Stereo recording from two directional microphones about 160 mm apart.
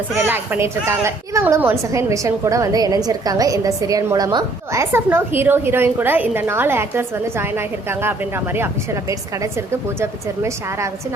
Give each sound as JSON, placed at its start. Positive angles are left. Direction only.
{"t": 0.3, "sound": "a woman's voice", "side_deg": -15}